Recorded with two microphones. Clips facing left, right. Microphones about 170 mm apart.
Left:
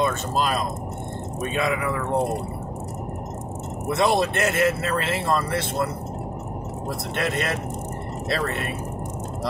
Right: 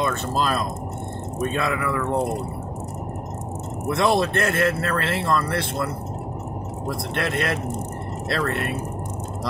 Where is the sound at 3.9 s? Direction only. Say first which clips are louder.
Right 1 dB; 20° left (ahead or behind).